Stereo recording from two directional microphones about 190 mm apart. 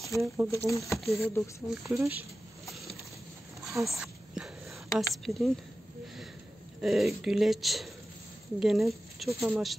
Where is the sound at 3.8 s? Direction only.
Centre (ahead or behind).